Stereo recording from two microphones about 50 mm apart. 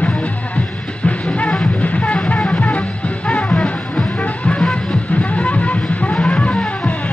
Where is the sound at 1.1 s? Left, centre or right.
Left.